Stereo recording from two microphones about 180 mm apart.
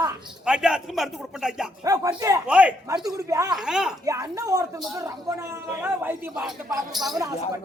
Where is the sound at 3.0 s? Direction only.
20° right (ahead or behind).